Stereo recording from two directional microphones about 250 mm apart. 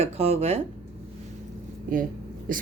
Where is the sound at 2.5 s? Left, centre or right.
Right.